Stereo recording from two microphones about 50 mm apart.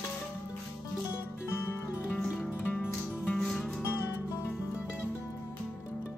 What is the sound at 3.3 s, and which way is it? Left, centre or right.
Music, centre.